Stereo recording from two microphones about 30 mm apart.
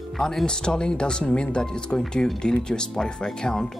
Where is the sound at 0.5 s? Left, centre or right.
Left.